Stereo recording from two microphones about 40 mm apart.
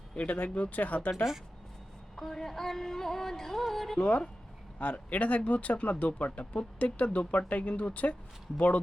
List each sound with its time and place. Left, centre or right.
0.2 s speech: left
2.1 s music: centre
4.8 s speech: left